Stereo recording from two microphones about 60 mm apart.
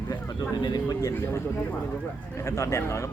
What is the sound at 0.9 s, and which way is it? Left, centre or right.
Speech, left.